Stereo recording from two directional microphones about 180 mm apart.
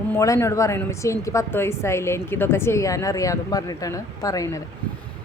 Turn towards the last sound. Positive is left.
turn(degrees=20)  # may be behind; listen again after turning